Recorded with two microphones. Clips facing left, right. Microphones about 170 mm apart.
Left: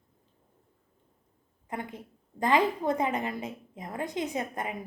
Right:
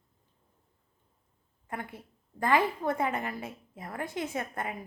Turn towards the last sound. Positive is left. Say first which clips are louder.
# left 2 dB
turn(degrees=20)  # may be behind; listen again after turning